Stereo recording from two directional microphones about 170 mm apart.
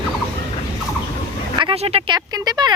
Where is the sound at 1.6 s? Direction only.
30° right (ahead or behind).